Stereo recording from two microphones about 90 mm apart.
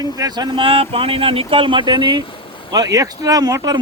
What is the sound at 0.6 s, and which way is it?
Speech, 90° right.